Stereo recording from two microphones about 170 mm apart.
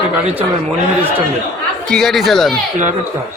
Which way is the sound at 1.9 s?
Centre (ahead or behind).